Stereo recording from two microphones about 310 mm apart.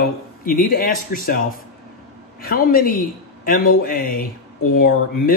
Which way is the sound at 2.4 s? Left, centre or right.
Left.